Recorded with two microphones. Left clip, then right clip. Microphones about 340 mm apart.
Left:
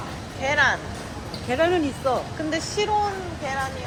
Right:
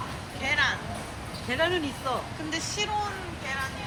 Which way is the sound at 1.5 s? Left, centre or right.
Left.